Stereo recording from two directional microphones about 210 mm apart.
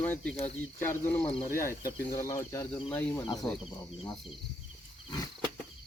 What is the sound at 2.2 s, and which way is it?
Speech, 15° left (ahead or behind).